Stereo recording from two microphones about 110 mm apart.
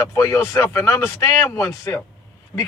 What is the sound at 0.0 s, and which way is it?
Speech, 30° left (ahead or behind).